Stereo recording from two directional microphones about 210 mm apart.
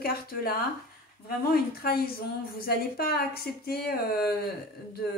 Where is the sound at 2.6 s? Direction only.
45° left (ahead or behind).